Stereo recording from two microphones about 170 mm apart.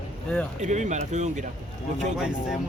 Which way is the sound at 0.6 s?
45° right (ahead or behind).